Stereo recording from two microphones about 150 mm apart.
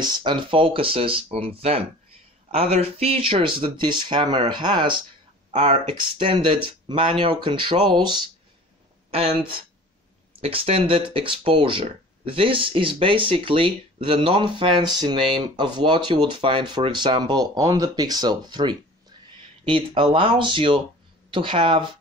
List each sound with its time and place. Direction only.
0.0 s speech: 30° right (ahead or behind)
10.4 s speech: 40° right (ahead or behind)